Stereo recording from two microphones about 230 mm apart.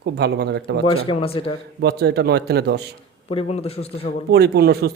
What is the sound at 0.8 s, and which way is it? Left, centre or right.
Speech, left.